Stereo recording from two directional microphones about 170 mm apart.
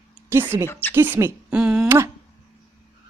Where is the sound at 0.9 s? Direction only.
10° right (ahead or behind).